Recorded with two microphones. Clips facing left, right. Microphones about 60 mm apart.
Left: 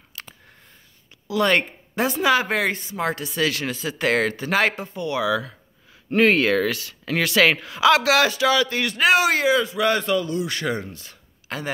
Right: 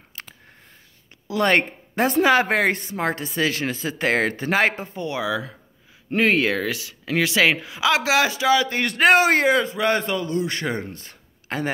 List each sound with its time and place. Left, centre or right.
0.2 s a sound: right
1.2 s a man's voice: right
3.0 s speech: right
6.0 s speech: centre
8.8 s speech: right
9.8 s a man's voice: right